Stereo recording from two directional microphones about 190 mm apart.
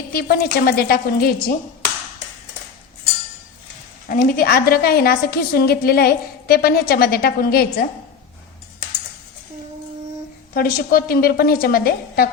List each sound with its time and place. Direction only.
0.1 s a woman's voice: 55° left (ahead or behind)
4.1 s a woman's voice: 45° left (ahead or behind)
10.5 s a woman's voice: 50° left (ahead or behind)